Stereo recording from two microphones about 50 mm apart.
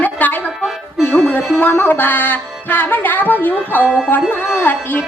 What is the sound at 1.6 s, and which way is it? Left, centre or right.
Music, left.